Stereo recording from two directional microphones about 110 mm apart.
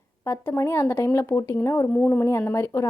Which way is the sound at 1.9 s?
10° left (ahead or behind).